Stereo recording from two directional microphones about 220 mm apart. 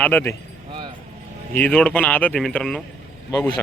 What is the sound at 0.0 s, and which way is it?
Speech, 10° left (ahead or behind).